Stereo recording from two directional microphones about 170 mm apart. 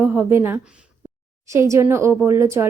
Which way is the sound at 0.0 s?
15° right (ahead or behind).